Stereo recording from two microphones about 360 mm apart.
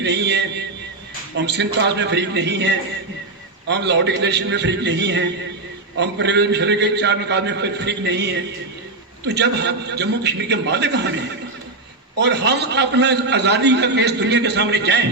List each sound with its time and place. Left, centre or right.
0.0 s a man's voice: right
12.2 s a man's voice: right